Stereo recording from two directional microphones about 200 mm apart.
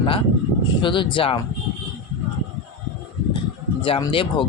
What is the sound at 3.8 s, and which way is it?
Speech, 25° left (ahead or behind).